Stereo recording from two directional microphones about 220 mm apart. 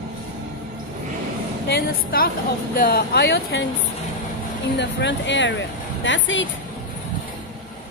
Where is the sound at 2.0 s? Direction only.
40° left (ahead or behind).